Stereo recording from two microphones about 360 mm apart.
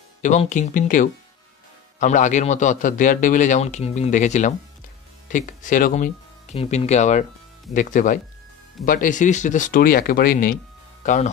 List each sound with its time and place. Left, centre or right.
0.2 s a man's voice: centre